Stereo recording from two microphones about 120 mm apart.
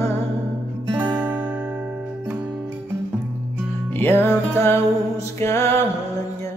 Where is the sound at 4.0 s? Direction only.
20° left (ahead or behind).